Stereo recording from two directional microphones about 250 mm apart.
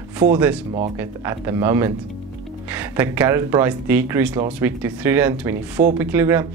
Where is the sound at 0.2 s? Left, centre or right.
Centre.